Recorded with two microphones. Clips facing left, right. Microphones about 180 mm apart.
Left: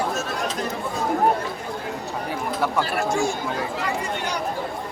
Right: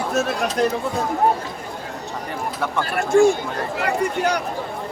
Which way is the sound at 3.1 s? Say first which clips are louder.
Right 9 dB; 55° right (ahead or behind).